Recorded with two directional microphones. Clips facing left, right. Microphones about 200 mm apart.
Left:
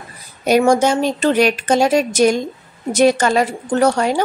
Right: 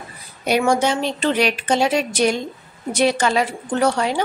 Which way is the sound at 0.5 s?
45° left (ahead or behind).